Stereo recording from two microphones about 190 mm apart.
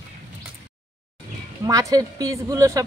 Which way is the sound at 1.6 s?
20° right (ahead or behind).